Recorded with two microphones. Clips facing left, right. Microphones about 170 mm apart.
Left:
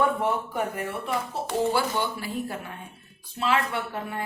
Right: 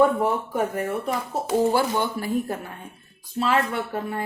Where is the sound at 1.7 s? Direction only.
45° right (ahead or behind).